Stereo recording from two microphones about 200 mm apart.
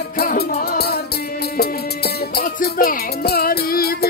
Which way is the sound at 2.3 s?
50° left (ahead or behind).